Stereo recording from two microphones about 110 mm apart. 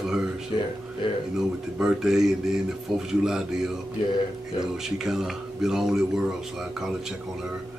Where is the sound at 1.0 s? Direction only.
50° left (ahead or behind).